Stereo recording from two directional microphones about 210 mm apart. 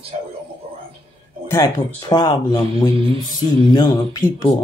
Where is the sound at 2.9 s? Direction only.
25° right (ahead or behind).